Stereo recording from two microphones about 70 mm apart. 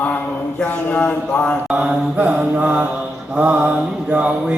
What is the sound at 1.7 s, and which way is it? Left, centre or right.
Mantra, centre.